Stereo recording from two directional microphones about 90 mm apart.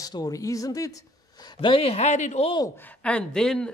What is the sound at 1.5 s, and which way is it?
Speech, 90° left.